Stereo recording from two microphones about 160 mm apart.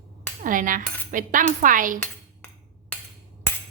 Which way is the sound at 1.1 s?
55° right (ahead or behind).